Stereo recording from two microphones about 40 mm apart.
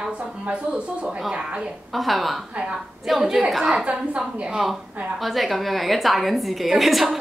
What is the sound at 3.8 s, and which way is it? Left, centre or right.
Speech, right.